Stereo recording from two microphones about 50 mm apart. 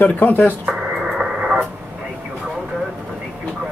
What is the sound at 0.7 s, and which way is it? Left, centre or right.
Radio, centre.